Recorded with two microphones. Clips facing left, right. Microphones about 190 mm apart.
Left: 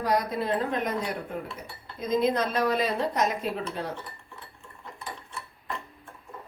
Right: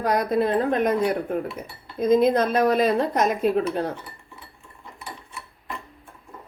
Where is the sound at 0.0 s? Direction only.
50° right (ahead or behind).